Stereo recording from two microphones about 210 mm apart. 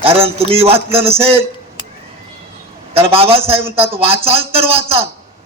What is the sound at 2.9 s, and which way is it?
Speech, 25° right (ahead or behind).